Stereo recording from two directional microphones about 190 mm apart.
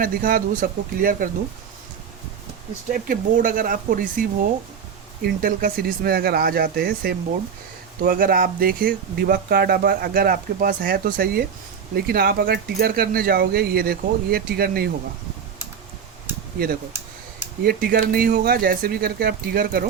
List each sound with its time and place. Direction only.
0.0 s speech: 45° right (ahead or behind)
2.9 s speech: 45° right (ahead or behind)
17.6 s speech: 50° right (ahead or behind)